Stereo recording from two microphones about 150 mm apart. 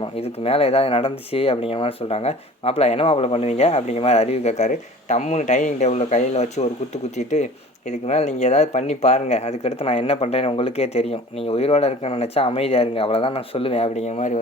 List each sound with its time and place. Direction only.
0.0 s speech: 40° left (ahead or behind)